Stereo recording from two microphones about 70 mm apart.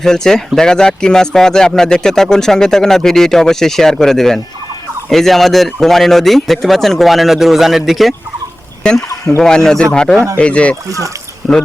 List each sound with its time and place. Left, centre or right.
0.0 s speech: centre
8.8 s speech: centre
10.8 s speech: right
11.4 s speech: centre